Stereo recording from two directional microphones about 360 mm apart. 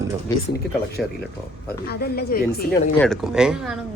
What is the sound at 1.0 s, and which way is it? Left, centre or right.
Speech, centre.